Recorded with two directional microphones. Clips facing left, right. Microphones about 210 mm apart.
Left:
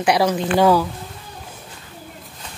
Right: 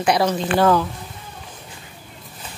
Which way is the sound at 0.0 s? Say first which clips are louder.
Left 1 dB; 10° left (ahead or behind).